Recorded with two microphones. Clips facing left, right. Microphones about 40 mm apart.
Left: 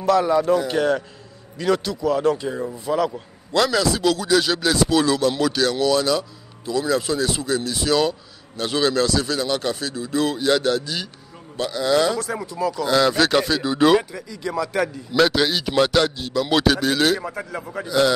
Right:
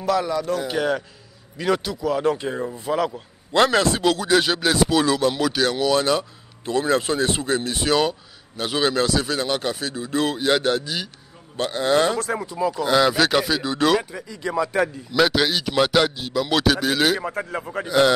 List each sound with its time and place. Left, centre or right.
0.0 s speech: centre
0.3 s speech: centre
0.6 s speech: centre
2.2 s a man's voice: right
3.5 s speech: right
4.0 s a man's voice: right
8.0 s a man's voice: centre
11.5 s speech: right
12.4 s speech: right; by 14.0 s centre
14.1 s a man's voice: right
15.1 s speech: centre
17.8 s a man's voice: right